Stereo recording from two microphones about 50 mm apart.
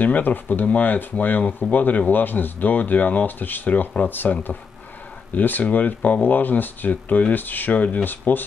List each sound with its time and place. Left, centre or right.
0.0 s speech: left